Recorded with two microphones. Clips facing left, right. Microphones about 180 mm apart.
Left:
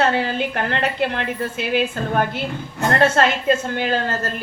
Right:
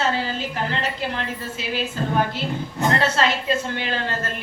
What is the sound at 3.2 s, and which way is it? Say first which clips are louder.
Speech: left 4 dB; 55° left (ahead or behind).